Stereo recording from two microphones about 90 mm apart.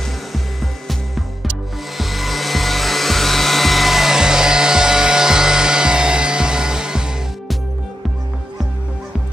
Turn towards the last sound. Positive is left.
turn(degrees=-10)  # may be behind; listen again after turning